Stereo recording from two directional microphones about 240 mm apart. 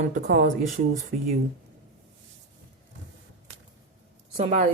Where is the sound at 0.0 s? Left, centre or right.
Right.